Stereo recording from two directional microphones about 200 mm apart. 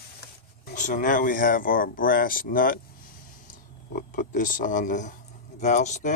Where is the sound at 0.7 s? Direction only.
40° left (ahead or behind).